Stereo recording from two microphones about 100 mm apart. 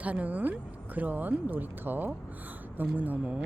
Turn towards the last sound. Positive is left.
turn(degrees=-15)  # may be behind; listen again after turning